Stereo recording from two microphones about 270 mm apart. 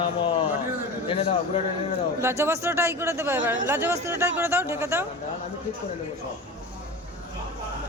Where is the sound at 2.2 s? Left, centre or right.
Centre.